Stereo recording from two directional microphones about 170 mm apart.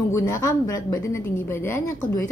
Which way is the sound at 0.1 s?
20° left (ahead or behind).